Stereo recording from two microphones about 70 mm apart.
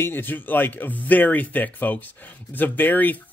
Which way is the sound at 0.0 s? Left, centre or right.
Left.